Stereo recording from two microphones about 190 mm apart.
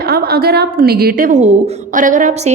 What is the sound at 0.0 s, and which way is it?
A woman's voice, 50° right (ahead or behind).